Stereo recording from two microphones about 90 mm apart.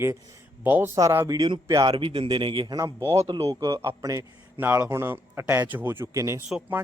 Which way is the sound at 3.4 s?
45° right (ahead or behind).